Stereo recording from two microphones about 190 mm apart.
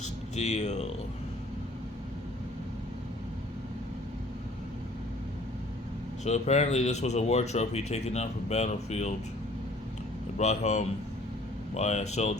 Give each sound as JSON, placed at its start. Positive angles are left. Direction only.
{"t": 0.0, "sound": "a sound", "side_deg": 35}
{"t": 6.2, "sound": "speech", "side_deg": 35}
{"t": 10.3, "sound": "speech", "side_deg": 35}